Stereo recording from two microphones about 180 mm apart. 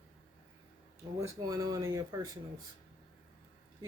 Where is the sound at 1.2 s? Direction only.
20° right (ahead or behind).